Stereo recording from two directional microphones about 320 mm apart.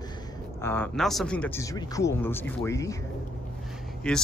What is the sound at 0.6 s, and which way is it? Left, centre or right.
Speech, centre.